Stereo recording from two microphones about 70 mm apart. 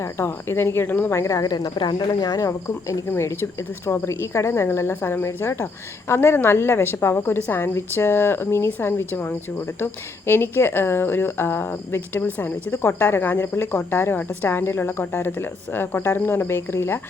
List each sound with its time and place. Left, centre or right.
0.0 s a woman's voice: left
1.1 s a woman's voice: left